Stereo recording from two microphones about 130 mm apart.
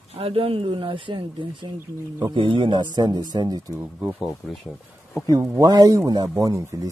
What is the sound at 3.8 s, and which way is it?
Speech, 15° right (ahead or behind).